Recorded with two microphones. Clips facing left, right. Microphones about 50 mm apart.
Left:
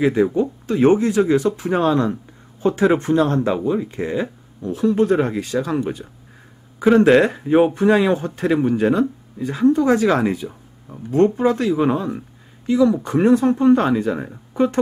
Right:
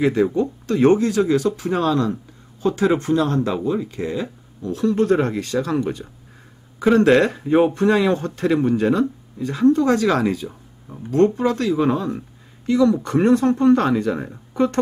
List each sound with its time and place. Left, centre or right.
0.0 s speech: centre
3.5 s a man's voice: centre
10.9 s speech: centre
11.2 s a man's voice: centre